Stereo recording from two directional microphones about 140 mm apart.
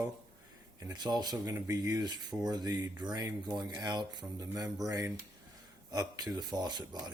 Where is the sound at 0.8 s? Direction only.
30° right (ahead or behind).